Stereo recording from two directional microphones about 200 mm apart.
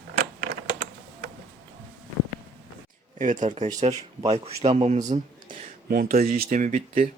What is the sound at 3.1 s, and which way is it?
Speech, 40° right (ahead or behind).